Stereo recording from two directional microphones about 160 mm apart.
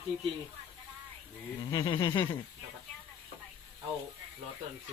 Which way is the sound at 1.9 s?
30° left (ahead or behind).